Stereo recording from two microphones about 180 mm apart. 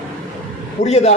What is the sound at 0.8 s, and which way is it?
Speech, 35° left (ahead or behind).